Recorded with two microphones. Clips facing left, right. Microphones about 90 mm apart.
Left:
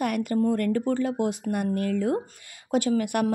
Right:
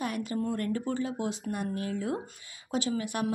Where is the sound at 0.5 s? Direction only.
55° left (ahead or behind).